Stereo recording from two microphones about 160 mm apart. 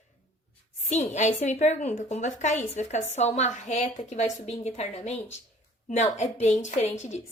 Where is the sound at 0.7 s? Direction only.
45° left (ahead or behind).